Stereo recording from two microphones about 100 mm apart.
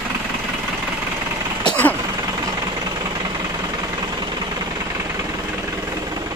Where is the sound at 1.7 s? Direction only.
15° left (ahead or behind).